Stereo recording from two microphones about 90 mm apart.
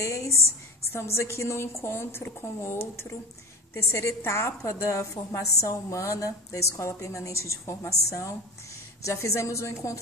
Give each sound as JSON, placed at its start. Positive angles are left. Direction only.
{"t": 0.0, "sound": "a woman's voice", "side_deg": 35}